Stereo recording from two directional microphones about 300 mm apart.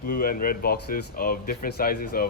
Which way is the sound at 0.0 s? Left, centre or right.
Left.